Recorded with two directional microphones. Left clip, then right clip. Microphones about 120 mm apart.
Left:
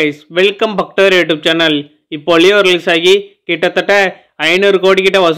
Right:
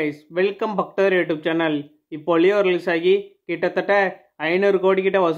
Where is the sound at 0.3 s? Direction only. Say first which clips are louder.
Left 9 dB; 15° left (ahead or behind).